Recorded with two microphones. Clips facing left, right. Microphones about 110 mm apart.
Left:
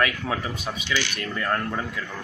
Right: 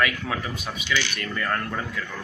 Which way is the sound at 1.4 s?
15° left (ahead or behind).